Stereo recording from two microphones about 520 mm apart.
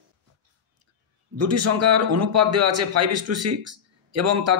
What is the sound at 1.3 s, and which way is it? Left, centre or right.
Speech, right.